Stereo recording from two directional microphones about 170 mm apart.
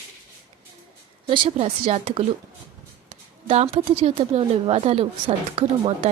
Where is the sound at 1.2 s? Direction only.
30° right (ahead or behind).